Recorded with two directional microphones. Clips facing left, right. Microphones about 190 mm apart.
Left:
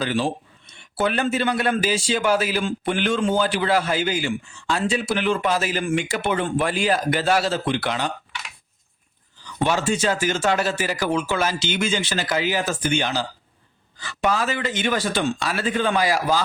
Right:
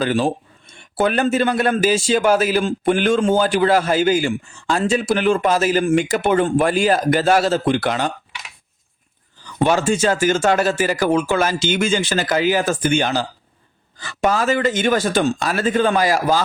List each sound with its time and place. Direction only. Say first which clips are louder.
0.0 s a man's voice: right 5 dB; 50° right (ahead or behind)
9.6 s a man's voice: right 5 dB; 50° right (ahead or behind)